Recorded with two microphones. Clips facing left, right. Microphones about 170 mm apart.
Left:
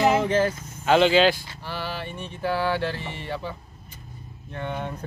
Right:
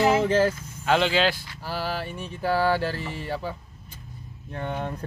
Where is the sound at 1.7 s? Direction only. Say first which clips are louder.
Right 2 dB; 40° right (ahead or behind).